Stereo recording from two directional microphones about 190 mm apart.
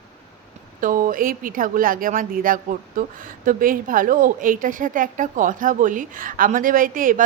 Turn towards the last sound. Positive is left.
turn(degrees=-45)  # may be behind; listen again after turning